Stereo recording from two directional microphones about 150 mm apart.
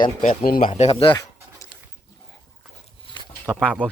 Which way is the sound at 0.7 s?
40° left (ahead or behind).